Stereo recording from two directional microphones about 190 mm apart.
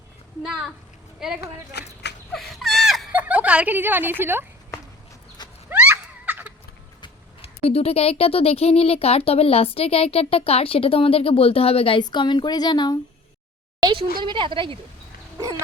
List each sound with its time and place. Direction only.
1.2 s speech: 5° right (ahead or behind)
1.7 s speech: 60° left (ahead or behind)
2.3 s whimper: centre (ahead or behind)
5.6 s a sound: 10° right (ahead or behind)
7.0 s speech: 30° left (ahead or behind)
13.7 s a sound: 20° right (ahead or behind)
14.2 s speech: 25° right (ahead or behind)